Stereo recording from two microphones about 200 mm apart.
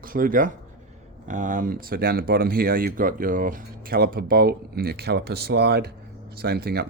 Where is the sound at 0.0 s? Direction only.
45° right (ahead or behind).